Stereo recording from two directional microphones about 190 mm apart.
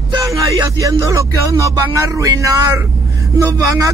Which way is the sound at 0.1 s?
15° right (ahead or behind).